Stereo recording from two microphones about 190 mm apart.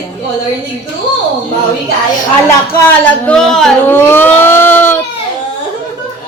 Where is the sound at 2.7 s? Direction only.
10° left (ahead or behind).